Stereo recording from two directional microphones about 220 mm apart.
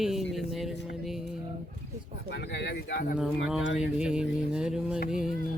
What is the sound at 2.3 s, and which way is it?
Speech, 50° left (ahead or behind).